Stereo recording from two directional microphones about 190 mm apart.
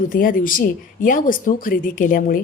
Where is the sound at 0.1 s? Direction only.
45° left (ahead or behind).